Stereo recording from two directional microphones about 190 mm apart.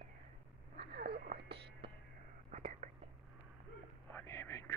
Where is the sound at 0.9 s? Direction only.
55° right (ahead or behind).